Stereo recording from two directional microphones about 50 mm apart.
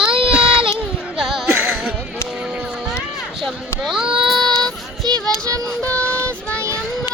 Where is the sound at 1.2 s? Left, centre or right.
Centre.